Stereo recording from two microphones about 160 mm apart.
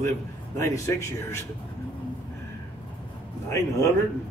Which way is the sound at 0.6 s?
20° left (ahead or behind).